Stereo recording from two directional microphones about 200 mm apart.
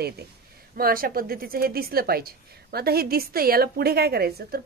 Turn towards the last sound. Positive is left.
turn(degrees=-50)  # may be behind; listen again after turning